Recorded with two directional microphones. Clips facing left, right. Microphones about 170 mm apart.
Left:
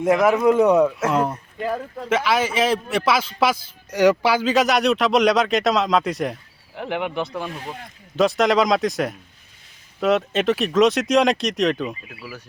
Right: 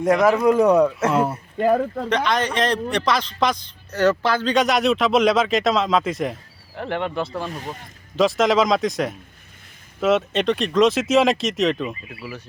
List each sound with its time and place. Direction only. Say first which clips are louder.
0.0 s a man's voice: even; 5° left (ahead or behind)
7.3 s a man's voice: right 1 dB; centre (ahead or behind)